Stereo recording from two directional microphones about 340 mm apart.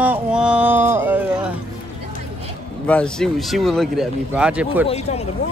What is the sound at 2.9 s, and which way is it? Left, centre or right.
Speech, centre.